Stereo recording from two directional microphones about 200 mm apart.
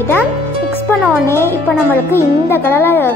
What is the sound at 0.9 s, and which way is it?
Music, 10° left (ahead or behind).